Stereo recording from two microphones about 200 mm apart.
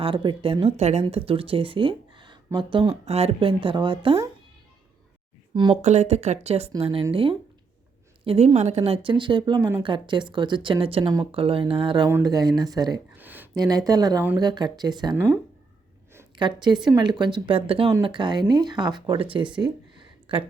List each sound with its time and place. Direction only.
0.0 s speech: 25° right (ahead or behind)
5.5 s speech: 30° right (ahead or behind)
15.1 s speech: 10° right (ahead or behind)
16.4 s a woman's voice: 20° right (ahead or behind)